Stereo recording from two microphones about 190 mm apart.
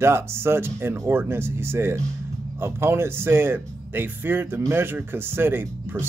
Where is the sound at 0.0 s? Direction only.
15° right (ahead or behind).